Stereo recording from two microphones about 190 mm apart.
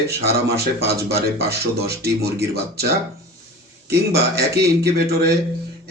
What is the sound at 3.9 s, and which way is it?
Speech, 60° right (ahead or behind).